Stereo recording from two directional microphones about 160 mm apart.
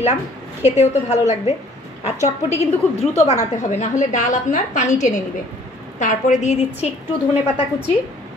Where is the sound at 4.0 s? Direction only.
50° left (ahead or behind).